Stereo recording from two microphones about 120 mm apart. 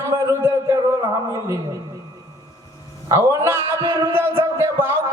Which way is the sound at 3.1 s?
25° right (ahead or behind).